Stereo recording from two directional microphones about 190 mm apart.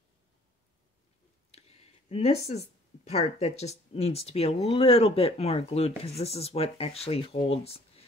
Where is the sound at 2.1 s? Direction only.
35° left (ahead or behind).